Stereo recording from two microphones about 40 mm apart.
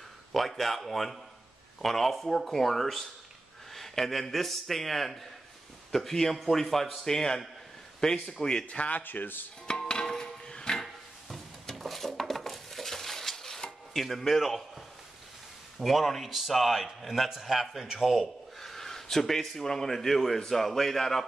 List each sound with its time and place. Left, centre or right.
0.3 s a man's voice: centre; by 8.6 s left
8.6 s speech: left
9.0 s speech: left
9.8 s a sound: centre
11.6 s dishes: centre
14.0 s a man's voice: centre
15.8 s a man's voice: centre
18.6 s speech: centre